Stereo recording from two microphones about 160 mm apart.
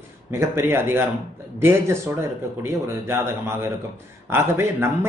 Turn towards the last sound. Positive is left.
turn(degrees=-15)  # may be behind; listen again after turning